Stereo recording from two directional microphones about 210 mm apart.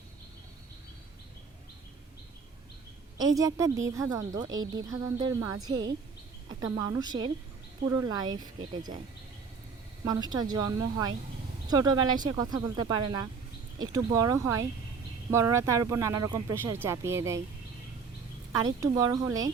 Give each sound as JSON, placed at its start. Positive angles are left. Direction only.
{"t": 3.2, "sound": "speech", "side_deg": -15}
{"t": 10.0, "sound": "speech", "side_deg": -20}
{"t": 18.6, "sound": "speech", "side_deg": -15}